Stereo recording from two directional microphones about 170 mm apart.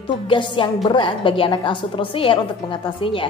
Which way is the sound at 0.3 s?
30° left (ahead or behind).